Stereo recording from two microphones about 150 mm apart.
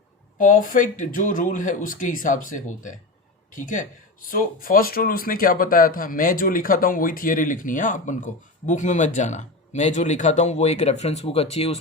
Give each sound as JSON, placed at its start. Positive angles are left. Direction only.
{"t": 0.3, "sound": "speech", "side_deg": 65}
{"t": 4.3, "sound": "speech", "side_deg": 70}